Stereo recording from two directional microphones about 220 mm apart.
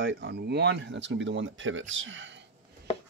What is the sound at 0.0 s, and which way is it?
Speech, 50° right (ahead or behind).